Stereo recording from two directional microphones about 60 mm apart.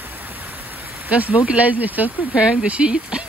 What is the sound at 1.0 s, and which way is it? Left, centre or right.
Speech, right.